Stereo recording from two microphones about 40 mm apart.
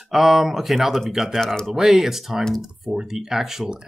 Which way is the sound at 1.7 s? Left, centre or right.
Centre.